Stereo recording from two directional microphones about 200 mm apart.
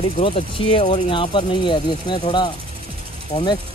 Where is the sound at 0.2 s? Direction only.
25° left (ahead or behind).